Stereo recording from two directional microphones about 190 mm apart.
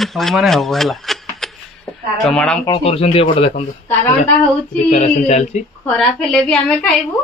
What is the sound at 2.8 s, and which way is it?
Female singing, 30° left (ahead or behind).